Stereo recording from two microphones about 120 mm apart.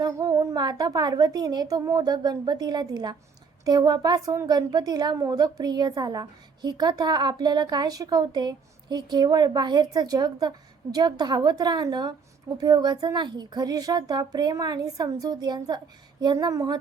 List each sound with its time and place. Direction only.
0.0 s a woman's voice: 30° right (ahead or behind)